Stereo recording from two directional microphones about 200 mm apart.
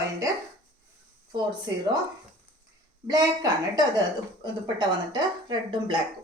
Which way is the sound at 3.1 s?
20° right (ahead or behind).